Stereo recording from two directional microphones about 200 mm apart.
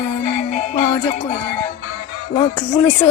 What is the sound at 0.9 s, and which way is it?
Music, 10° left (ahead or behind).